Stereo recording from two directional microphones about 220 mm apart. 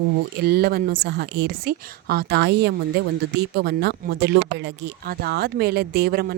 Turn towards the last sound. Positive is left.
turn(degrees=-45)  # may be behind; listen again after turning